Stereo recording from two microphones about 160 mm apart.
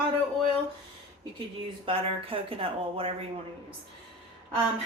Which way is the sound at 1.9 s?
35° right (ahead or behind).